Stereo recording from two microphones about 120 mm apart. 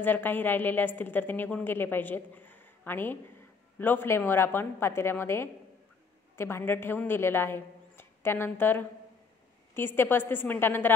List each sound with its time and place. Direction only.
0.0 s a woman's voice: 15° left (ahead or behind)